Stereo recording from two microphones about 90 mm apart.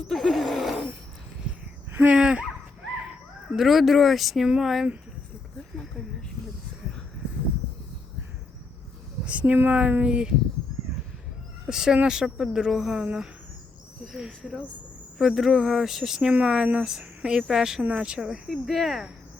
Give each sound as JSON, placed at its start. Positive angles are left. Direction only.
{"t": 0.0, "sound": "a sound", "side_deg": 0}
{"t": 1.9, "sound": "a sound", "side_deg": -20}
{"t": 2.1, "sound": "speech", "side_deg": -10}
{"t": 3.5, "sound": "speech", "side_deg": -5}
{"t": 9.2, "sound": "speech", "side_deg": -15}
{"t": 11.7, "sound": "speech", "side_deg": -5}
{"t": 15.2, "sound": "speech", "side_deg": -5}